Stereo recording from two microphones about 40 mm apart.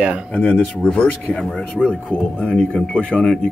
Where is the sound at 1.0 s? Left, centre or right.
Left.